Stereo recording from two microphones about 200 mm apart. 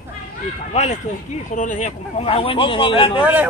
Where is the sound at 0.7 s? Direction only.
35° left (ahead or behind).